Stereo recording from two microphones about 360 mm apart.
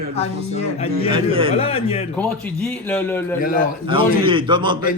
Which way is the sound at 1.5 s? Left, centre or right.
Centre.